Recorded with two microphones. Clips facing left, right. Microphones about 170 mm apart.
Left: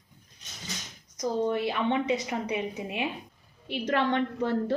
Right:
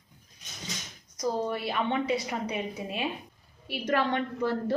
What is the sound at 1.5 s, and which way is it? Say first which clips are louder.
A woman's voice: left 3 dB; 20° left (ahead or behind).